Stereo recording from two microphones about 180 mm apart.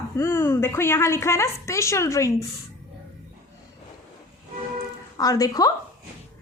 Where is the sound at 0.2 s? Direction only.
15° left (ahead or behind).